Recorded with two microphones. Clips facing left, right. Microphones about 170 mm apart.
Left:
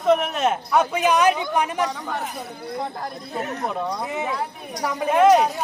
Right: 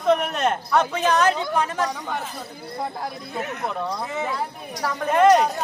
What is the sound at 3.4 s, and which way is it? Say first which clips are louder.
Speech: left 1 dB; 40° left (ahead or behind).